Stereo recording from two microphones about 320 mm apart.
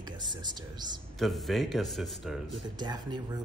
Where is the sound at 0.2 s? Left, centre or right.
Centre.